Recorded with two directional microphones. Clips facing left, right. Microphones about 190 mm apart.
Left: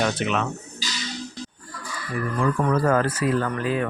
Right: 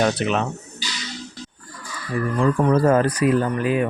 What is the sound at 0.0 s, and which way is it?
Speech, 35° right (ahead or behind).